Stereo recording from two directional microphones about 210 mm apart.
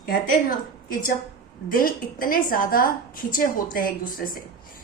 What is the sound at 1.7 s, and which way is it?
A woman's voice, 40° left (ahead or behind).